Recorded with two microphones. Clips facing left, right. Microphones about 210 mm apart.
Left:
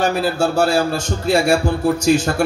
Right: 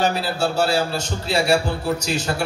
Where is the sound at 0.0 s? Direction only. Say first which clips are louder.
Left 4 dB; 50° left (ahead or behind).